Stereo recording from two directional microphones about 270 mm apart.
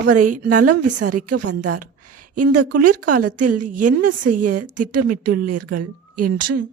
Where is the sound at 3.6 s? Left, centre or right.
Right.